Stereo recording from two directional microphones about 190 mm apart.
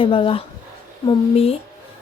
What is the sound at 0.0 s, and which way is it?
A woman's voice, 25° left (ahead or behind).